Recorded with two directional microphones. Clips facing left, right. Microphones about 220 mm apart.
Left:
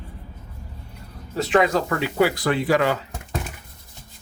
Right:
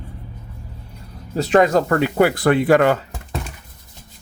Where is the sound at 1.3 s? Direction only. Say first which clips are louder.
Right 4 dB; 40° right (ahead or behind).